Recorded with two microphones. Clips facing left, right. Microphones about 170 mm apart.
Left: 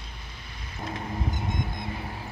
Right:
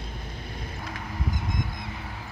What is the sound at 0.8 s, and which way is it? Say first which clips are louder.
Vehicle: left 4 dB; 25° left (ahead or behind).